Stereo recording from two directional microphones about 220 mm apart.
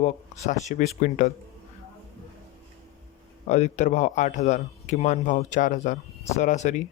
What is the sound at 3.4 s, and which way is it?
A man's voice, 30° left (ahead or behind).